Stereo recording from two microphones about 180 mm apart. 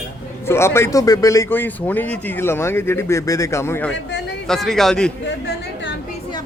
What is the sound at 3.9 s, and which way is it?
Speech, 75° left (ahead or behind).